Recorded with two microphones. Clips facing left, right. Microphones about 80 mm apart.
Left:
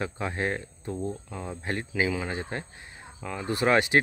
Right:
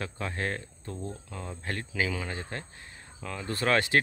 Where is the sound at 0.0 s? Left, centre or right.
Centre.